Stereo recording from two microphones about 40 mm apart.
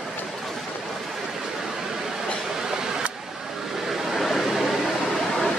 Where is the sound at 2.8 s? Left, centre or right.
Centre.